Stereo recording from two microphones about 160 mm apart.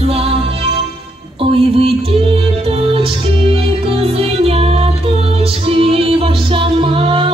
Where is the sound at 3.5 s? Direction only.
35° right (ahead or behind).